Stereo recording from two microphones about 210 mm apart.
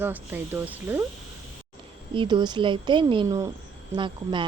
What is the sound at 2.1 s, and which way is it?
A woman's voice, 25° right (ahead or behind).